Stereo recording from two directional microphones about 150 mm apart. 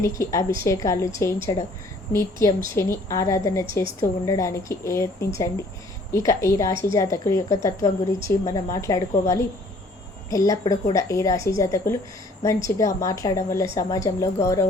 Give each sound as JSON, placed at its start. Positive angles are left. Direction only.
{"t": 0.2, "sound": "speech", "side_deg": 20}